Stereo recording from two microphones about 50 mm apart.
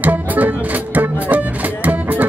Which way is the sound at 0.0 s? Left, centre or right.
Right.